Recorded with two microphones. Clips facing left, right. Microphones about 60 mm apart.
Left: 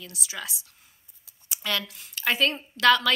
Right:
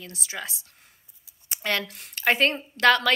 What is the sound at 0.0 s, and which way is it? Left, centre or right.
A woman's voice, right.